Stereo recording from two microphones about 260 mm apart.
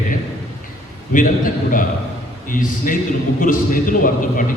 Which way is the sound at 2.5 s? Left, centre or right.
Left.